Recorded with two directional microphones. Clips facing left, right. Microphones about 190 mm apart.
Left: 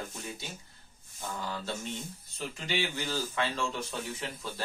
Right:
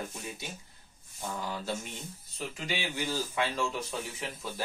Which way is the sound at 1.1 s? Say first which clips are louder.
Right 1 dB; 10° right (ahead or behind).